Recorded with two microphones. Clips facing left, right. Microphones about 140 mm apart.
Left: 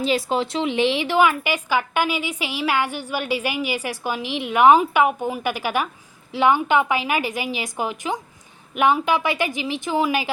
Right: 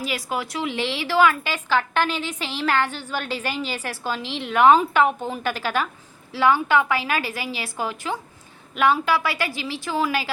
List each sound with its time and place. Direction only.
0.0 s a woman's voice: 25° left (ahead or behind)